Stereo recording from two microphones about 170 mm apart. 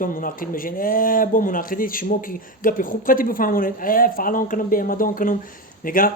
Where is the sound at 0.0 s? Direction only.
55° left (ahead or behind).